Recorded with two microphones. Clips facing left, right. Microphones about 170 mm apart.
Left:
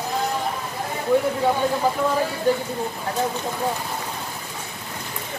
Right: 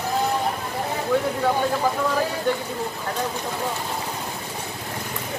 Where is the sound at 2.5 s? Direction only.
35° left (ahead or behind).